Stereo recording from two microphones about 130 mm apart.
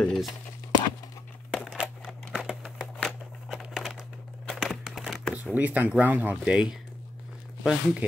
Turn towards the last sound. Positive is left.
turn(degrees=0)  # may be behind; listen again after turning